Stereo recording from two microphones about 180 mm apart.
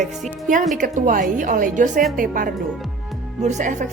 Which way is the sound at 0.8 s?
50° right (ahead or behind).